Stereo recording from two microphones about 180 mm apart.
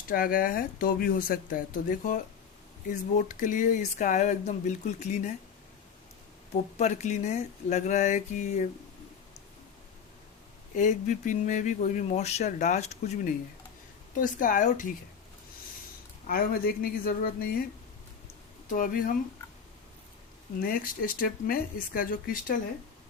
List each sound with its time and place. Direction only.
0.1 s speech: 50° left (ahead or behind)
3.2 s speech: 45° left (ahead or behind)
6.7 s speech: 40° left (ahead or behind)
10.8 s speech: 45° left (ahead or behind)
14.2 s speech: 50° left (ahead or behind)
16.2 s speech: 55° left (ahead or behind)
18.7 s speech: 50° left (ahead or behind)
20.6 s speech: 50° left (ahead or behind)